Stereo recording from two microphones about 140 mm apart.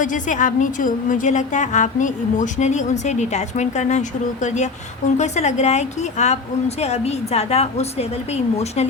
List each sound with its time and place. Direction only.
0.0 s a woman's voice: 65° left (ahead or behind); by 8.9 s 50° left (ahead or behind)